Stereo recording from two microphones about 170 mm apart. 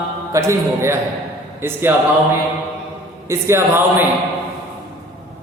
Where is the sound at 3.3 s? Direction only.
15° right (ahead or behind).